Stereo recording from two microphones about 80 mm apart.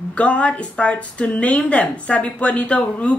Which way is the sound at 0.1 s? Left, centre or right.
Centre.